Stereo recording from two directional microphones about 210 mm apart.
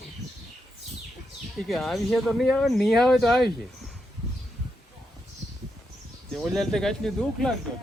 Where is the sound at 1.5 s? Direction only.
Centre (ahead or behind).